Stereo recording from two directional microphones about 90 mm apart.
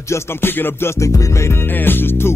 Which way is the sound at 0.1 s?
25° left (ahead or behind).